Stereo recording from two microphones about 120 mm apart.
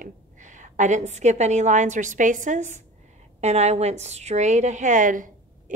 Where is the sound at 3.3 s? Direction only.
65° right (ahead or behind).